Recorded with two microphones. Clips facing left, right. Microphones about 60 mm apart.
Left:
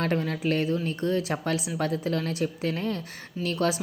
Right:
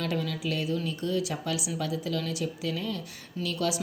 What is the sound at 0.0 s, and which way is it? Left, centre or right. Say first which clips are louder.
Speech: left 4 dB; left.